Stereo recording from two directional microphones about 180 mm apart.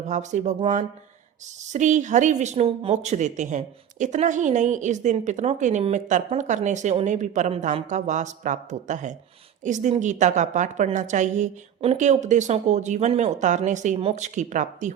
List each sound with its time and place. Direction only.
0.1 s speech: 40° right (ahead or behind)